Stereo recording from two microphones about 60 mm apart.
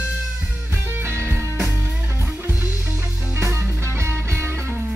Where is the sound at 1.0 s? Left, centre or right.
Right.